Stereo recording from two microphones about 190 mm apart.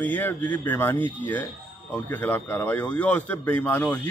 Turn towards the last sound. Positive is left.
turn(degrees=5)  # may be behind; listen again after turning